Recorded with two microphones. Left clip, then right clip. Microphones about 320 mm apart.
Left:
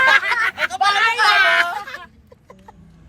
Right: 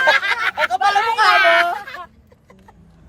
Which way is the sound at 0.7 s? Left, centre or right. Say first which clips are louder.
Even; right.